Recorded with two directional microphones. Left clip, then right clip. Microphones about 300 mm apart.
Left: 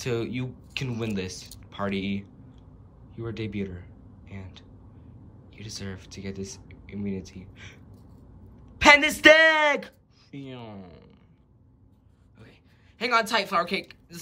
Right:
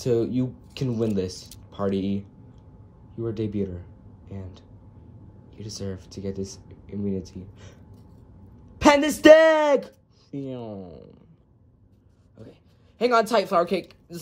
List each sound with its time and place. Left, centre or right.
0.0 s speech: centre
8.7 s a sound: centre
9.2 s speech: centre
10.7 s speech: left
12.4 s speech: centre